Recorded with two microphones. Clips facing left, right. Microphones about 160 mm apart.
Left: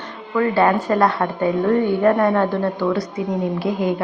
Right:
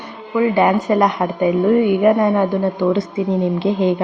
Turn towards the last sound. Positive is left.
turn(degrees=-25)  # may be behind; listen again after turning